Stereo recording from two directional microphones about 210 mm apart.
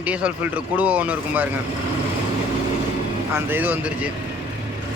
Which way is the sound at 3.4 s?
10° right (ahead or behind).